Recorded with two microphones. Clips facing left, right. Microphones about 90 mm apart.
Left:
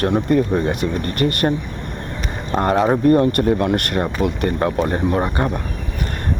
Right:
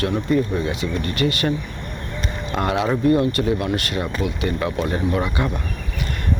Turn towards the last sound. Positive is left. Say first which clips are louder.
# left 3 dB
turn(degrees=45)  # may be behind; listen again after turning